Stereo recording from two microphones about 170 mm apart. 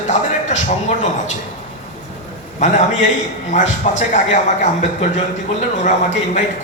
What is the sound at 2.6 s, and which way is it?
Speech, 45° left (ahead or behind).